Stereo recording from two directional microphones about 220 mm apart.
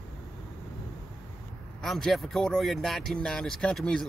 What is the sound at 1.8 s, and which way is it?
Speech, centre (ahead or behind).